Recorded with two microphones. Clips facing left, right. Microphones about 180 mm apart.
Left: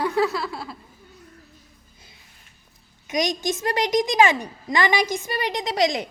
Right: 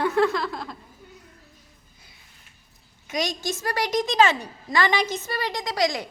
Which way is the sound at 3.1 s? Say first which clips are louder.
Left 4 dB; 15° left (ahead or behind).